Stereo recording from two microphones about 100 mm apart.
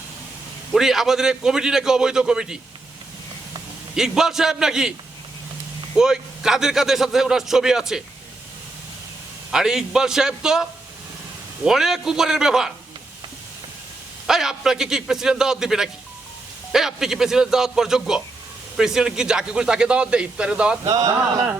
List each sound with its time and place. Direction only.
0.7 s a man's voice: 5° right (ahead or behind)
3.9 s a man's voice: 5° right (ahead or behind)
6.0 s a man's voice: 5° right (ahead or behind)
9.5 s a man's voice: 5° right (ahead or behind)
14.3 s a man's voice: 5° right (ahead or behind)
20.8 s speech: 35° right (ahead or behind)